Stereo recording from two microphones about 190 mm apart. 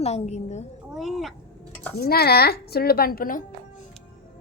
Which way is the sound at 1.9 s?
55° left (ahead or behind).